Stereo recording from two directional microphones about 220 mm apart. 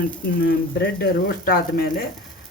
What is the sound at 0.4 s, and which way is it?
Speech, 45° left (ahead or behind).